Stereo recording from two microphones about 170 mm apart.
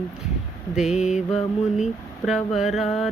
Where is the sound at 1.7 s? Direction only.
Centre (ahead or behind).